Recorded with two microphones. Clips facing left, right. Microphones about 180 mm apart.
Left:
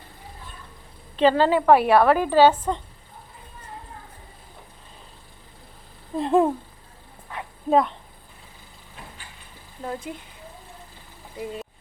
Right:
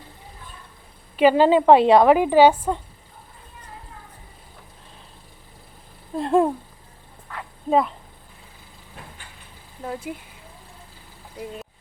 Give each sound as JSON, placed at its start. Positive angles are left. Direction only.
{"t": 1.1, "sound": "a woman's voice", "side_deg": -10}
{"t": 6.1, "sound": "speech", "side_deg": 0}
{"t": 7.3, "sound": "dog", "side_deg": 20}
{"t": 7.7, "sound": "speech", "side_deg": 0}
{"t": 9.8, "sound": "speech", "side_deg": -5}
{"t": 11.3, "sound": "speech", "side_deg": 0}